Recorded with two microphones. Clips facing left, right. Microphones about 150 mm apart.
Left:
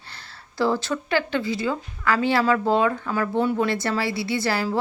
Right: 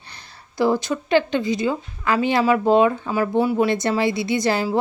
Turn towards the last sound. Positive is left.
turn(degrees=-20)  # may be behind; listen again after turning